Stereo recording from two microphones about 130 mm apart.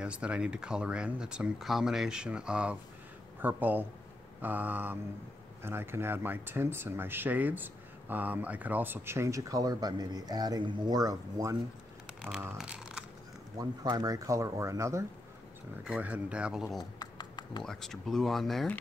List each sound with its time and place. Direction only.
0.0 s speech: 10° right (ahead or behind); by 11.5 s 30° right (ahead or behind)
12.2 s speech: 5° right (ahead or behind)
12.5 s a sound: 5° right (ahead or behind)
13.6 s speech: 30° right (ahead or behind)
15.8 s speech: 10° right (ahead or behind)
17.0 s a sound: 35° left (ahead or behind)
17.6 s speech: 5° left (ahead or behind)